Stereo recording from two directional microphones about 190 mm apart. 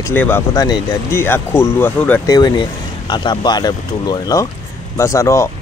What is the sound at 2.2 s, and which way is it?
Speech, 20° left (ahead or behind).